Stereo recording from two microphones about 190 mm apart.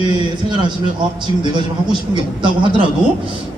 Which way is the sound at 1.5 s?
25° right (ahead or behind).